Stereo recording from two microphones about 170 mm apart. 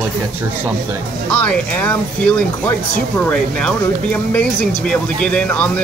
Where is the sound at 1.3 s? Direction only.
5° left (ahead or behind).